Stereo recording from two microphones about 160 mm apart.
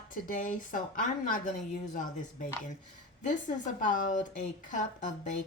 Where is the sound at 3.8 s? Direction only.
55° left (ahead or behind).